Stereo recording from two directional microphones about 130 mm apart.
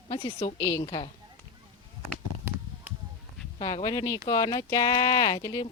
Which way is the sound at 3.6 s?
35° left (ahead or behind).